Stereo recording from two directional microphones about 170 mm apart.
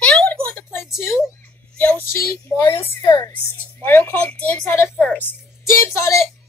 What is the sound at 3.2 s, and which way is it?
A woman's voice, 10° left (ahead or behind).